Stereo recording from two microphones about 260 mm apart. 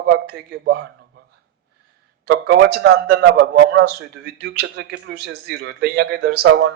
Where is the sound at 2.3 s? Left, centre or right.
Right.